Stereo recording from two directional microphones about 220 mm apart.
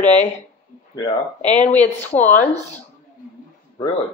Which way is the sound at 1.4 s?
30° left (ahead or behind).